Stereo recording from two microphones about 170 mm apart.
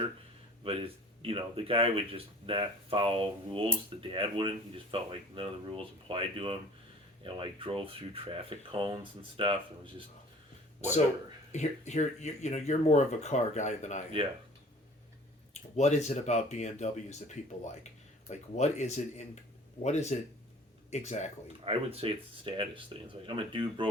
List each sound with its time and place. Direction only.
0.6 s speech: 30° right (ahead or behind)
11.5 s speech: 45° left (ahead or behind)
15.5 s speech: 40° left (ahead or behind)
21.4 s speech: 35° right (ahead or behind)